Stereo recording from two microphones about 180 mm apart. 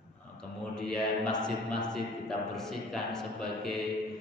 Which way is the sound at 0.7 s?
5° left (ahead or behind).